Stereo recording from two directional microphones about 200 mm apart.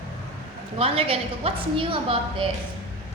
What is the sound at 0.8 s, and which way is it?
A woman's voice, 30° right (ahead or behind).